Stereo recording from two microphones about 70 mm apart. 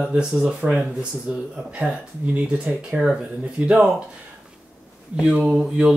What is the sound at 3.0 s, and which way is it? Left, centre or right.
Speech, centre.